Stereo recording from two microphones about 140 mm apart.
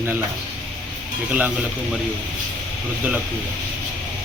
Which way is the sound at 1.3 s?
10° right (ahead or behind).